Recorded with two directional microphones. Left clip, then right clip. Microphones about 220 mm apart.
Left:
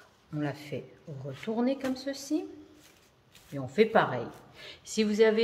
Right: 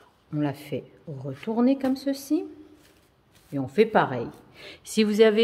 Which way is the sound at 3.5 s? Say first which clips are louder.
Right 3 dB; 45° right (ahead or behind).